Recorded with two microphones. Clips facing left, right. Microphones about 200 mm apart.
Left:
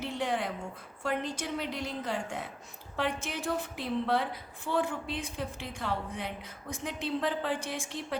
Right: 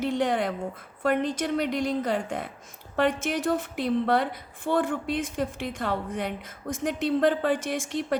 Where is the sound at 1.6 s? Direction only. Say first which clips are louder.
Right 9 dB; 85° right.